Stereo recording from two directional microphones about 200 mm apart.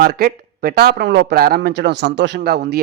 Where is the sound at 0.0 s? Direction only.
50° right (ahead or behind).